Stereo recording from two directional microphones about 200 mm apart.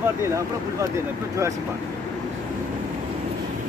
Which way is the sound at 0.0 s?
15° right (ahead or behind).